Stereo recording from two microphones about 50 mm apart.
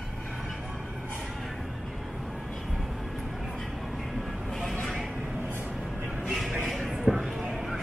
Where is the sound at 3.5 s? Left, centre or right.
Centre.